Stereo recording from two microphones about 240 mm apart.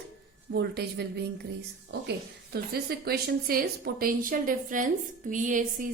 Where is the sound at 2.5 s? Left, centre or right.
Right.